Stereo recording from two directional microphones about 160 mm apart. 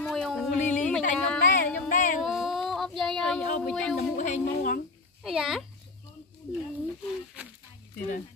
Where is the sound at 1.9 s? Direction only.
55° left (ahead or behind).